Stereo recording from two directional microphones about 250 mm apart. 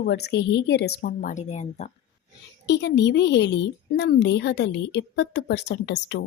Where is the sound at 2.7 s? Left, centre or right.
Left.